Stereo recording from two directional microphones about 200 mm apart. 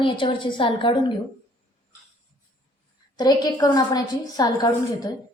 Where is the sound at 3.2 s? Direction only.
20° left (ahead or behind).